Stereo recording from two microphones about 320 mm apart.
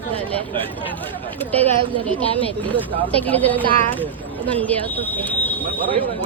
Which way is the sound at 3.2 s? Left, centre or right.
Centre.